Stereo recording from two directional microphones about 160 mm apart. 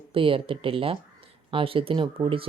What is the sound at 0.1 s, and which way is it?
Speech, 35° right (ahead or behind).